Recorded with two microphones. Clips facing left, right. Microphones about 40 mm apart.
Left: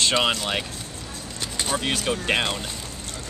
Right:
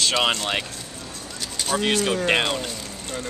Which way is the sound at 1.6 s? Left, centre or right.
Left.